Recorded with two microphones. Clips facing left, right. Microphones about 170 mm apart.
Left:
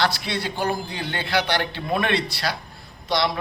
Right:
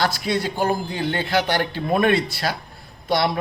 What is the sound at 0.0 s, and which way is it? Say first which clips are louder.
A man's voice: right 2 dB; 45° right (ahead or behind).